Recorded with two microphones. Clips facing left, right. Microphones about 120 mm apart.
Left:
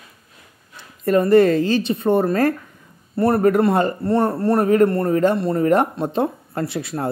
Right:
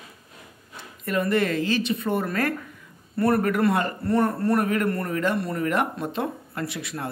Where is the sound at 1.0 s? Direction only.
35° left (ahead or behind).